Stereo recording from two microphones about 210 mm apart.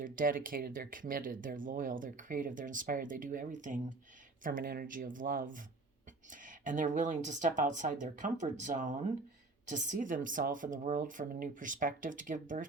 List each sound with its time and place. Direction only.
0.0 s speech: 40° right (ahead or behind)